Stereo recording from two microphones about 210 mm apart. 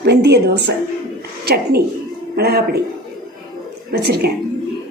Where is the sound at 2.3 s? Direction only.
50° right (ahead or behind).